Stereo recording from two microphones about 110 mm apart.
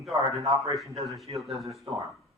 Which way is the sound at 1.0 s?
Centre (ahead or behind).